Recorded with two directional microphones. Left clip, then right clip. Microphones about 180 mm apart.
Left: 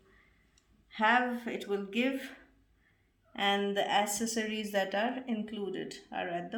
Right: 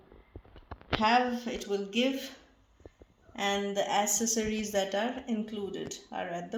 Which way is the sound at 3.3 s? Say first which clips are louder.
Left 1 dB; 20° right (ahead or behind).